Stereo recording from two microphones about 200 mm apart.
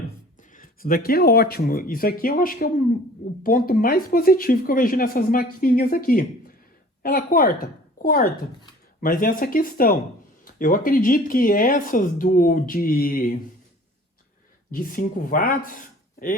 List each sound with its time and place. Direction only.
0.5 s a woman's voice: 45° left (ahead or behind)
14.7 s speech: 45° left (ahead or behind)